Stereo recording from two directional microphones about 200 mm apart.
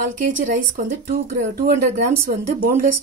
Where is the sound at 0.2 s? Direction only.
40° right (ahead or behind).